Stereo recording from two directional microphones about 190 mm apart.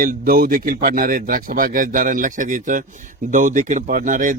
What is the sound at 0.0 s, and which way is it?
A man's voice, 50° right (ahead or behind).